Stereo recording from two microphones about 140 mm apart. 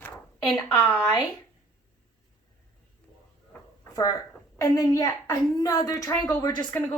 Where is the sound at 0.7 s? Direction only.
15° left (ahead or behind).